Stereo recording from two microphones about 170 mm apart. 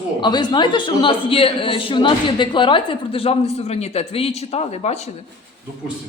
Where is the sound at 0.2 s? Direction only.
25° left (ahead or behind).